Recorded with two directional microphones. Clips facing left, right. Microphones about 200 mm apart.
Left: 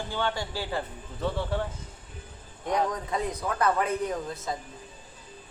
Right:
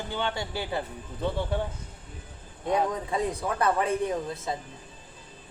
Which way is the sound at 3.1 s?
30° right (ahead or behind).